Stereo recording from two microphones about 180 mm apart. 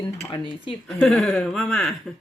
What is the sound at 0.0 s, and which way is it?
Speech, 20° left (ahead or behind).